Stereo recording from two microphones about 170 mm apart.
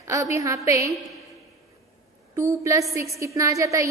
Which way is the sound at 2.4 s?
20° right (ahead or behind).